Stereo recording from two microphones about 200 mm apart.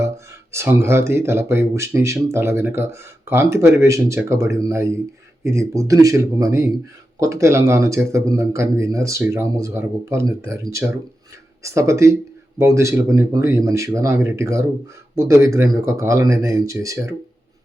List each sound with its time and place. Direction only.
0.5 s speech: 15° right (ahead or behind)